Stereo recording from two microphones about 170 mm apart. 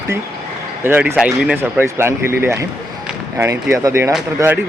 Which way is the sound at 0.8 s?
10° right (ahead or behind).